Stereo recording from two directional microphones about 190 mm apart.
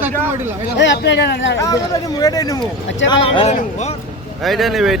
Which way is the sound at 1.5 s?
15° left (ahead or behind).